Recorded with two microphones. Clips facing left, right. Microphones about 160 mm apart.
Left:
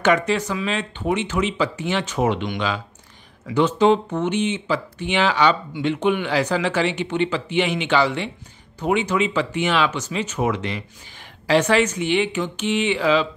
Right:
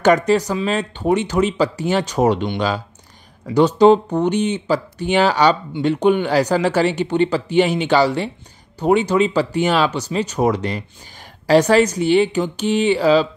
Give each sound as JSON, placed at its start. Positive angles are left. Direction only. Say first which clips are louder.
{"t": 0.0, "sound": "speech", "louder": "right 5 dB", "side_deg": -40}